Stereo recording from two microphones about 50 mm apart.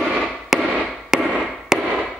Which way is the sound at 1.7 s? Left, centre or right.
Centre.